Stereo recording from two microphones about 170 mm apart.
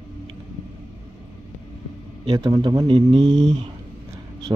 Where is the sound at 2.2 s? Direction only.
25° right (ahead or behind).